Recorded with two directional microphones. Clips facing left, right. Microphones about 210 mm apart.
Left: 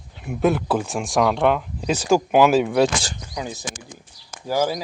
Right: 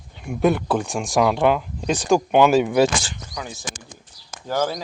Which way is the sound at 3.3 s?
20° left (ahead or behind).